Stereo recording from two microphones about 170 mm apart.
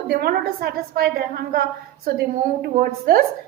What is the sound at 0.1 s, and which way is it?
A woman's voice, 65° right (ahead or behind).